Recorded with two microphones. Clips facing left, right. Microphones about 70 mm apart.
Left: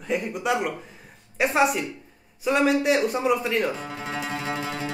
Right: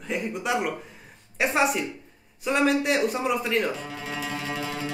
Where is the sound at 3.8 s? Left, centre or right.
Left.